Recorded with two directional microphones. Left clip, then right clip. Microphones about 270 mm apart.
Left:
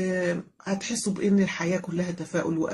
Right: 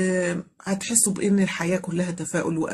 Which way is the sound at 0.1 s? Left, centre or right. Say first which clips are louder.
Right 2 dB; right.